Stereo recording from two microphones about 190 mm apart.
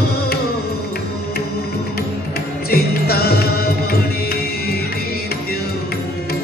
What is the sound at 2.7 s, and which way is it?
Music, 55° left (ahead or behind).